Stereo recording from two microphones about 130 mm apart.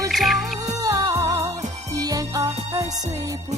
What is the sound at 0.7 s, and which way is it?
Music, 30° right (ahead or behind).